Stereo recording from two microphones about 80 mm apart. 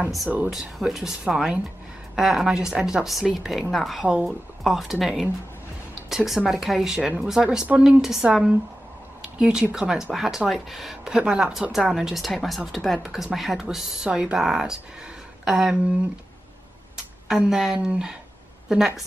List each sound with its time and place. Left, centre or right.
0.5 s speech: centre
7.0 s speech: centre
8.0 s speech: centre
16.9 s a sound: centre
17.7 s speech: centre